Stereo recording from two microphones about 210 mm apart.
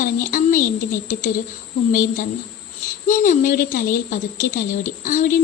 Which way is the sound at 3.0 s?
40° left (ahead or behind).